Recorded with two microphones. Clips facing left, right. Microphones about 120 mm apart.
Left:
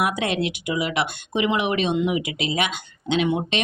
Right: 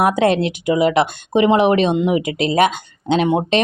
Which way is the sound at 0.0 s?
45° right (ahead or behind).